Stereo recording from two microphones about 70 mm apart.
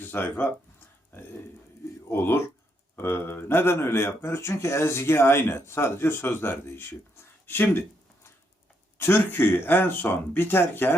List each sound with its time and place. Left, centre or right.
0.0 s speech: left
2.0 s speech: left
9.0 s speech: left